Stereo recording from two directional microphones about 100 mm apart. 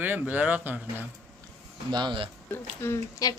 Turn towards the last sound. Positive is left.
turn(degrees=30)  # may be behind; listen again after turning